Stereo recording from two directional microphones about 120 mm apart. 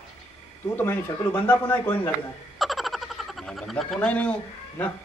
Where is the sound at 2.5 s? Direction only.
Centre (ahead or behind).